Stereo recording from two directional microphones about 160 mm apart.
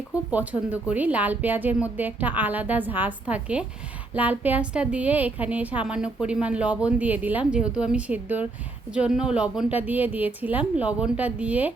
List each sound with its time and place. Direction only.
0.3 s a woman's voice: 10° right (ahead or behind)